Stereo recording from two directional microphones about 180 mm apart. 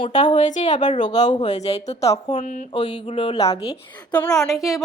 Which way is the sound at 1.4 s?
40° left (ahead or behind).